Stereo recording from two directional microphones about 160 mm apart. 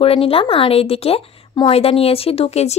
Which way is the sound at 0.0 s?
35° left (ahead or behind).